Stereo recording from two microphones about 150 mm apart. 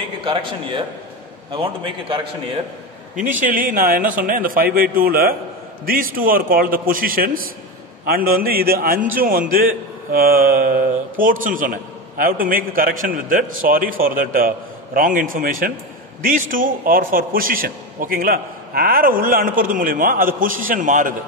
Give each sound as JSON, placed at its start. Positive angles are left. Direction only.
{"t": 0.2, "sound": "a man's voice", "side_deg": -35}
{"t": 3.3, "sound": "a man's voice", "side_deg": -65}